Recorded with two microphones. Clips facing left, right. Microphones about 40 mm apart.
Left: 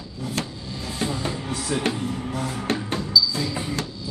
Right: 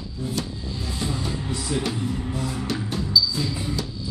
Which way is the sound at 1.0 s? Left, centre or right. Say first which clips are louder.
Left 2 dB; left.